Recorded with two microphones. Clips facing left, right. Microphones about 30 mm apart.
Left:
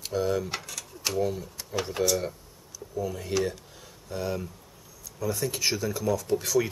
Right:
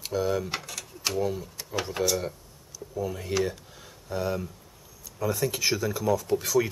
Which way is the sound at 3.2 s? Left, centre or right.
Centre.